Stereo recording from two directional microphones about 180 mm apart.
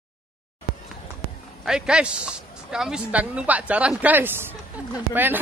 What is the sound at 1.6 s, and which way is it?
Speech, 5° right (ahead or behind).